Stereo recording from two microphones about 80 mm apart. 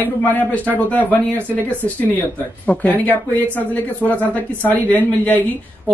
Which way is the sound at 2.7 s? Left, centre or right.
Centre.